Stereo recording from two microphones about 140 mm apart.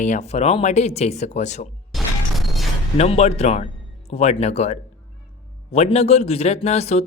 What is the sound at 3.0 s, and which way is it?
A man's voice, 50° left (ahead or behind).